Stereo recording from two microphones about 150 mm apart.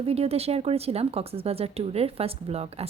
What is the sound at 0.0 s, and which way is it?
A woman's voice, 40° right (ahead or behind).